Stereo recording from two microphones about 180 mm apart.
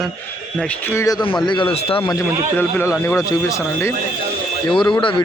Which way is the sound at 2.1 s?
15° left (ahead or behind).